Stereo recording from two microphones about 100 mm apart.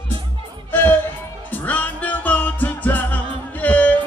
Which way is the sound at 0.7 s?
20° left (ahead or behind).